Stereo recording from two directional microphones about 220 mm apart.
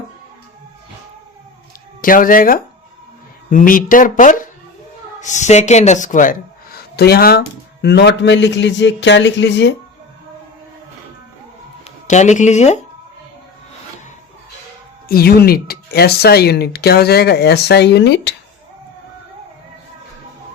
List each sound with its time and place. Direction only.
2.0 s speech: 40° left (ahead or behind)
12.0 s speech: 35° left (ahead or behind)
15.0 s speech: 45° left (ahead or behind)